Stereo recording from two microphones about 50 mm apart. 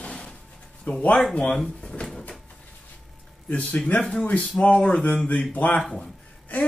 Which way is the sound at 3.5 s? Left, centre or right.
Left.